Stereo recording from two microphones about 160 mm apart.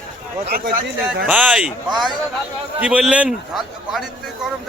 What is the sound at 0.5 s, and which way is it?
Speech, 65° right (ahead or behind).